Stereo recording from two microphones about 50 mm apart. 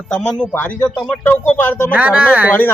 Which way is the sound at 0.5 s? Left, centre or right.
Left.